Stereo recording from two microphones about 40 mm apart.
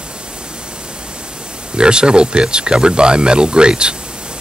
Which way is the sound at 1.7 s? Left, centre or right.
Right.